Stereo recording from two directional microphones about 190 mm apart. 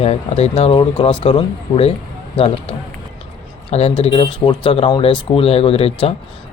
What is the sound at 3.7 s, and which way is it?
Speech, 30° left (ahead or behind).